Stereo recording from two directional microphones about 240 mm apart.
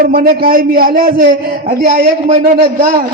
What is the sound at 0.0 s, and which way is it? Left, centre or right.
A man's voice, right.